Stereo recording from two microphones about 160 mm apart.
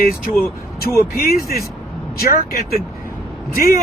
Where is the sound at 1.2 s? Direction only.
70° left (ahead or behind).